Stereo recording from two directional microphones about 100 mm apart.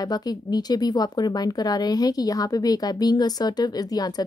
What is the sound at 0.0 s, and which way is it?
Speech, 40° left (ahead or behind).